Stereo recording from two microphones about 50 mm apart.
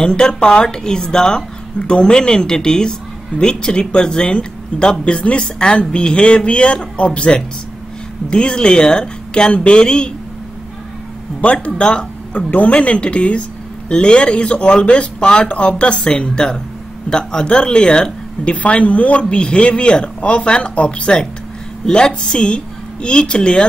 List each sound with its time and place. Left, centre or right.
0.0 s speech: centre
11.4 s speech: left